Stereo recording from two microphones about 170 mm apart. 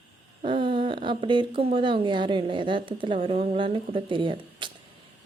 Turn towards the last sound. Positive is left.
turn(degrees=-30)  # may be behind; listen again after turning